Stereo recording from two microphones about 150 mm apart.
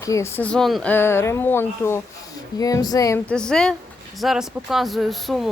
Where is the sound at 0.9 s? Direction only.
15° left (ahead or behind).